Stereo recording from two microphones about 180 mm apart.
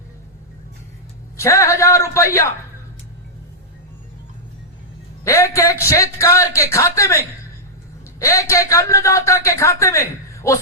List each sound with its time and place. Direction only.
1.4 s a man's voice: 15° left (ahead or behind)
5.2 s a man's voice: 15° left (ahead or behind)